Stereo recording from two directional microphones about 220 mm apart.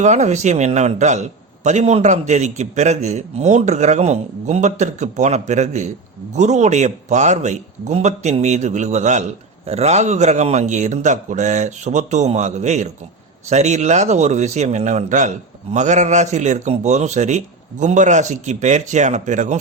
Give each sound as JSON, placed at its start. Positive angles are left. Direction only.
{"t": 0.0, "sound": "a man's voice", "side_deg": -30}